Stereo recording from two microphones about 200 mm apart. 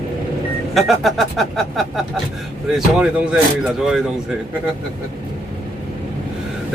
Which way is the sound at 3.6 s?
Centre (ahead or behind).